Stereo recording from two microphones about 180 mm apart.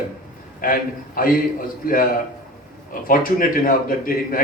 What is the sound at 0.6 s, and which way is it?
A man's voice, 50° left (ahead or behind).